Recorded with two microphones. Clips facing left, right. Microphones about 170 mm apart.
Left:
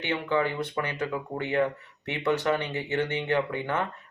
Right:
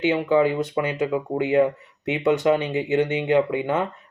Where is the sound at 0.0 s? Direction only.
20° right (ahead or behind).